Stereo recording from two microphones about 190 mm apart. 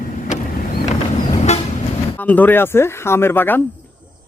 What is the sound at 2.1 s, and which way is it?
Speech, 10° left (ahead or behind).